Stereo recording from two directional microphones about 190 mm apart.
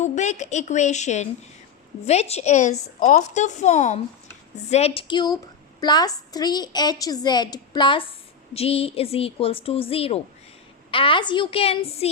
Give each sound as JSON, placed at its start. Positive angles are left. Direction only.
{"t": 0.0, "sound": "a woman's voice", "side_deg": 40}